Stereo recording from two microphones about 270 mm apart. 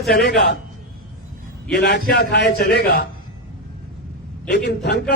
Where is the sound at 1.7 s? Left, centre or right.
Left.